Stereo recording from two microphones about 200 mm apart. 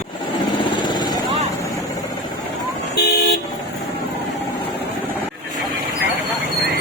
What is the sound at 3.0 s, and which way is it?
Vehicle, 55° left (ahead or behind).